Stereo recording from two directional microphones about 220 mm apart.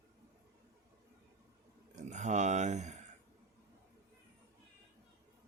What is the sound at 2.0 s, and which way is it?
Speech, 30° right (ahead or behind).